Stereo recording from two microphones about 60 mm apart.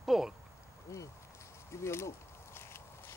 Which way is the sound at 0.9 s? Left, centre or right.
Left.